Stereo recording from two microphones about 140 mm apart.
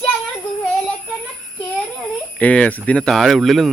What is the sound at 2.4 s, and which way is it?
Cricket, 10° left (ahead or behind).